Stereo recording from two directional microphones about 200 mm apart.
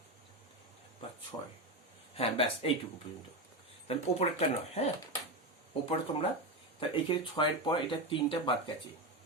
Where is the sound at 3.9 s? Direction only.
30° left (ahead or behind).